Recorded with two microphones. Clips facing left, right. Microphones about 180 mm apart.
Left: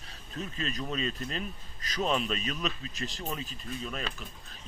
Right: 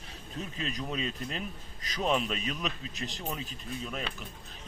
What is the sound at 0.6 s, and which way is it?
A man's voice, 10° right (ahead or behind).